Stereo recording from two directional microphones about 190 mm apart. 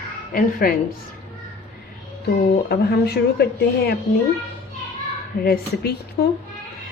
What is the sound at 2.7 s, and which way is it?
Speech, 60° left (ahead or behind).